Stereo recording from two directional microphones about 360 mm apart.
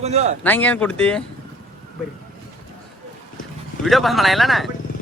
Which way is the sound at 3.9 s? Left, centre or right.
Centre.